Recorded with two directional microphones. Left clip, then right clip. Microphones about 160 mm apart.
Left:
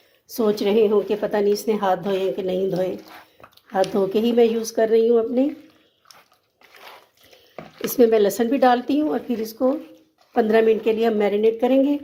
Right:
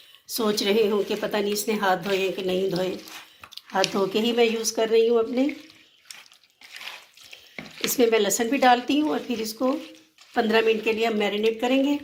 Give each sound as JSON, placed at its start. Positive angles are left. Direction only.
{"t": 0.3, "sound": "a woman's voice", "side_deg": 60}
{"t": 4.1, "sound": "speech", "side_deg": 45}
{"t": 7.9, "sound": "speech", "side_deg": 50}